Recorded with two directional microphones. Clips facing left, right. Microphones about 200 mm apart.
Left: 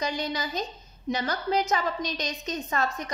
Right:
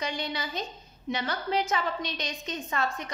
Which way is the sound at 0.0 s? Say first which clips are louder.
Left 3 dB; 40° left (ahead or behind).